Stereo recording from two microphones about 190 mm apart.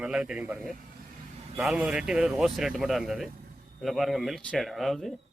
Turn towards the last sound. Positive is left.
turn(degrees=0)  # may be behind; listen again after turning